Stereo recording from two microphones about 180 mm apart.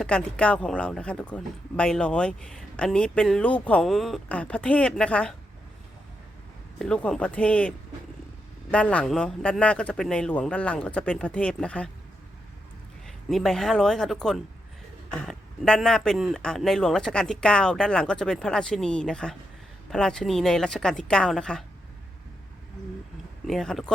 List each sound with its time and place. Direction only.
0.0 s speech: 5° left (ahead or behind)
6.7 s a man's voice: 5° left (ahead or behind)
8.7 s a man's voice: 5° left (ahead or behind)
13.1 s speech: centre (ahead or behind)
23.5 s speech: centre (ahead or behind)